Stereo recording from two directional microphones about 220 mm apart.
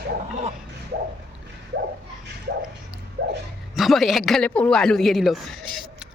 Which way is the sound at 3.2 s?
50° right (ahead or behind).